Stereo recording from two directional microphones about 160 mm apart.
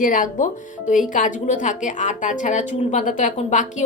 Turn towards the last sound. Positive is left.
turn(degrees=50)  # may be behind; listen again after turning